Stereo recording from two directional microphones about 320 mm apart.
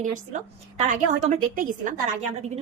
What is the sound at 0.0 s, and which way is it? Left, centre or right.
A woman's voice, right.